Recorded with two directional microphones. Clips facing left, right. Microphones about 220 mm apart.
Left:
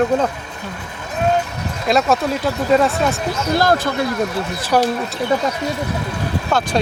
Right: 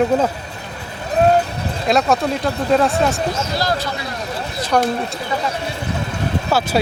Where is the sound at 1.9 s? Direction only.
Centre (ahead or behind).